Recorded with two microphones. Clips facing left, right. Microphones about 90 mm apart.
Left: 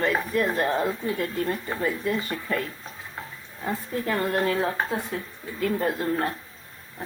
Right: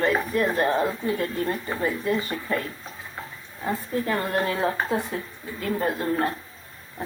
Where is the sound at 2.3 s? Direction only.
20° right (ahead or behind).